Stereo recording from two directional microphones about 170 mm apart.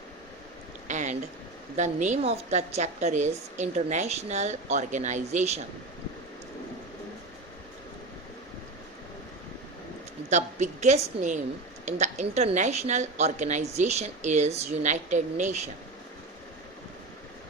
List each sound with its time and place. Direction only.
0.9 s a sound: 45° right (ahead or behind)
1.7 s a woman's voice: 45° right (ahead or behind)
10.2 s a woman's voice: 45° right (ahead or behind)